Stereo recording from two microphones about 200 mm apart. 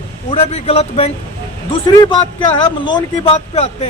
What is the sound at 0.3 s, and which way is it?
A man's voice, 30° left (ahead or behind).